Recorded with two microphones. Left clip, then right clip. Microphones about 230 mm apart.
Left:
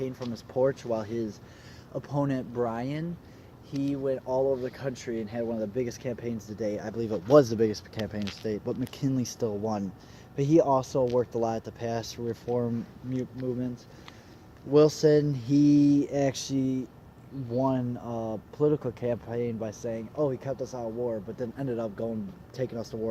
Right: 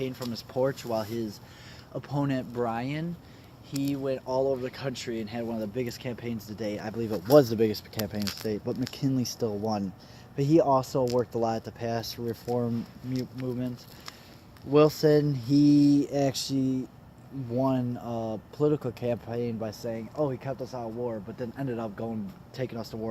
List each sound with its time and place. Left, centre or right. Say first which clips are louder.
0.0 s speech: right 1 dB; right
2.0 s speech: left 1 dB; right
14.7 s speech: even; right